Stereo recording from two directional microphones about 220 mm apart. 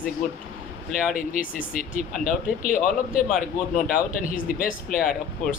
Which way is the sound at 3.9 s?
40° left (ahead or behind).